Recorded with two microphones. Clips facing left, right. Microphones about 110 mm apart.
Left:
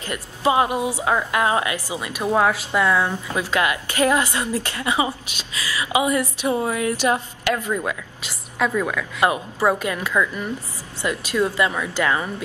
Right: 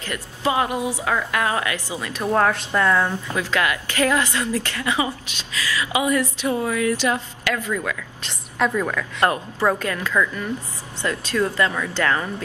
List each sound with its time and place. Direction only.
0.0 s a woman's voice: 20° left (ahead or behind)
3.3 s a woman's voice: 20° left (ahead or behind)
8.2 s a woman's voice: 5° left (ahead or behind)